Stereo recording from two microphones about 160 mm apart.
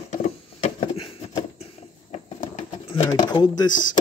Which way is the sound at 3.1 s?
25° left (ahead or behind).